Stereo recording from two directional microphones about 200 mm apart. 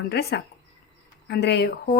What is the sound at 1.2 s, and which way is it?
Speech, 55° left (ahead or behind).